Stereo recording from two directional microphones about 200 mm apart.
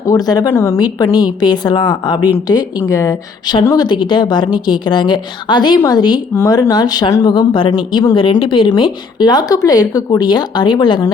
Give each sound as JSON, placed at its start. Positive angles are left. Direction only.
{"t": 0.1, "sound": "a woman's voice", "side_deg": 20}